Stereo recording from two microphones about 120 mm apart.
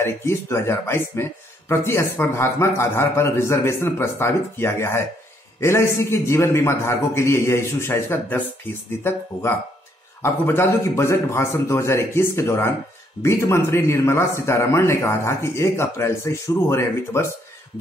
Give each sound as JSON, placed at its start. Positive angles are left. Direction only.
{"t": 0.0, "sound": "a man's voice", "side_deg": 20}